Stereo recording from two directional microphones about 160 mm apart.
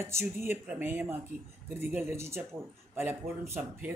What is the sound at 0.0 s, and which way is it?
Speech, 15° right (ahead or behind).